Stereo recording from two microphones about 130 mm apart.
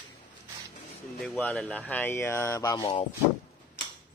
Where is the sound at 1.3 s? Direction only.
10° left (ahead or behind).